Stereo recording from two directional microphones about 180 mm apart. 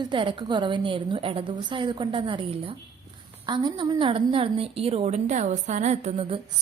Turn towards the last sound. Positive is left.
turn(degrees=-30)  # may be behind; listen again after turning